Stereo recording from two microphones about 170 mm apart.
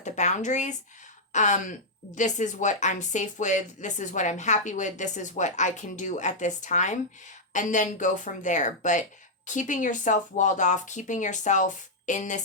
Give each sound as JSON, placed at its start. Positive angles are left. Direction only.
{"t": 0.0, "sound": "a woman's voice", "side_deg": 45}